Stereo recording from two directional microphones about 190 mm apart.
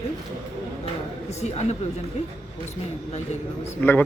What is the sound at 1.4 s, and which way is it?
Speech, 35° left (ahead or behind).